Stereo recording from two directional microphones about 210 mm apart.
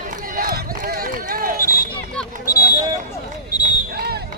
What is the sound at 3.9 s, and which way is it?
Fire alarm, 50° right (ahead or behind).